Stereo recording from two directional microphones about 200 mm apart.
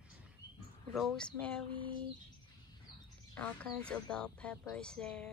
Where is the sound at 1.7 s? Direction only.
25° right (ahead or behind).